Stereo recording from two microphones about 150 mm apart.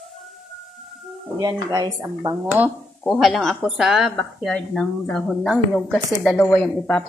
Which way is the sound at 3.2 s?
Centre (ahead or behind).